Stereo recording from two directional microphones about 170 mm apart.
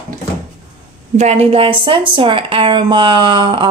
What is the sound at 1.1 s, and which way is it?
A woman's voice, 40° right (ahead or behind).